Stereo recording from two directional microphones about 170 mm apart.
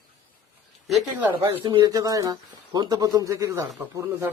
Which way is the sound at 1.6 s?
30° right (ahead or behind).